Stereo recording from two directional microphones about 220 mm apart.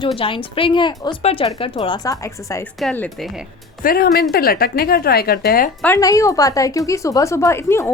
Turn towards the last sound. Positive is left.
turn(degrees=10)  # may be behind; listen again after turning